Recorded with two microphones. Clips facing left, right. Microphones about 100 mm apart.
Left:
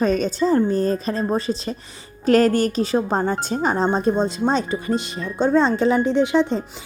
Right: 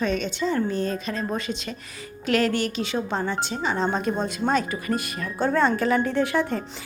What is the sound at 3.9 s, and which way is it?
Speech, 30° left (ahead or behind).